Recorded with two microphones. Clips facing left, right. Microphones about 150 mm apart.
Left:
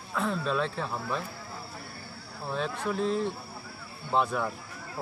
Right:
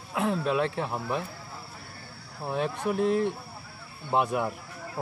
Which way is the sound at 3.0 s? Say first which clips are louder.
Right 4 dB; 60° right (ahead or behind).